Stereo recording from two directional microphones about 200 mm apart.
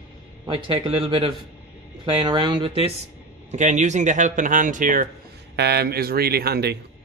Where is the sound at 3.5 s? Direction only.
35° right (ahead or behind).